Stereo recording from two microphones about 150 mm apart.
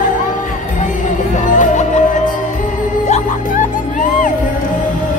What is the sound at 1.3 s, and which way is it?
Music, 55° left (ahead or behind).